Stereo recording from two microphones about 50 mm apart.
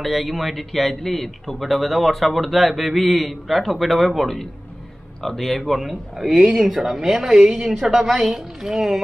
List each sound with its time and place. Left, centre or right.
0.0 s a man's voice: centre